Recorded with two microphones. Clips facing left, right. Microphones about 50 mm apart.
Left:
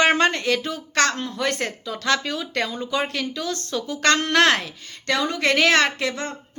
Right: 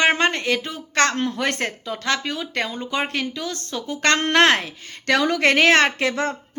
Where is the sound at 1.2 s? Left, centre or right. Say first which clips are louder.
Right 2 dB; right.